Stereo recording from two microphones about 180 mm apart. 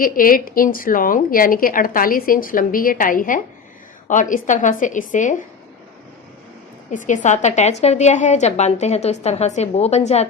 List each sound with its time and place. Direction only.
0.0 s a woman's voice: 50° left (ahead or behind)
6.9 s a woman's voice: 45° left (ahead or behind)